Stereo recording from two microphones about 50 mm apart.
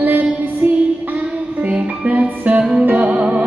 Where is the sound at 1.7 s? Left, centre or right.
Right.